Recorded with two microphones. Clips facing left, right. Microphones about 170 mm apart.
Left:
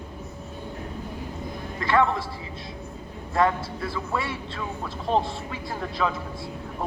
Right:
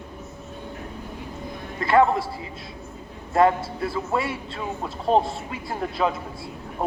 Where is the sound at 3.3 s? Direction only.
30° right (ahead or behind).